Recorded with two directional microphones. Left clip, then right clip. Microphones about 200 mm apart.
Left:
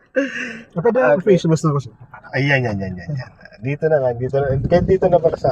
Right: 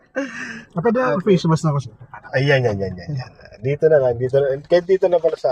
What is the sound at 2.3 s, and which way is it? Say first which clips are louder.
Speech: right 1 dB; 15° right (ahead or behind).